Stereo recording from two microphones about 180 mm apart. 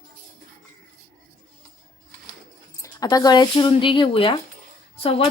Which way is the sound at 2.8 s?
20° left (ahead or behind).